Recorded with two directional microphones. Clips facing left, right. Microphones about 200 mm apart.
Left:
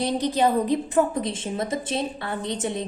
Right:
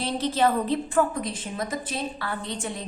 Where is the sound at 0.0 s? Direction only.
15° left (ahead or behind).